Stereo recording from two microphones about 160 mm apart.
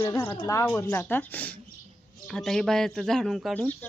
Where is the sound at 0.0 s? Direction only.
15° left (ahead or behind).